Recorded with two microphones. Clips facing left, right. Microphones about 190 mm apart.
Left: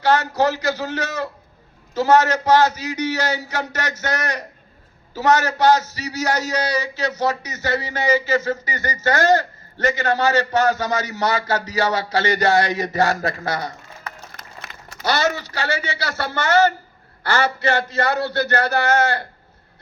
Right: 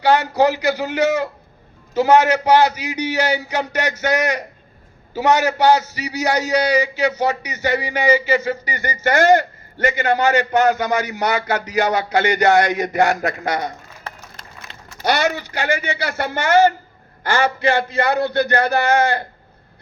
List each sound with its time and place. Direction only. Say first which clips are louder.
0.0 s a man's voice: right 3 dB; 15° right (ahead or behind)
12.7 s a man's voice: right 2 dB; 15° right (ahead or behind)
14.3 s a sound: even; 70° left (ahead or behind)
15.0 s a man's voice: right 2 dB; 15° right (ahead or behind)